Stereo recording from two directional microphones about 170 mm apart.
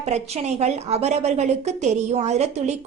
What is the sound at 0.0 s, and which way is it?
A woman's voice, 40° right (ahead or behind).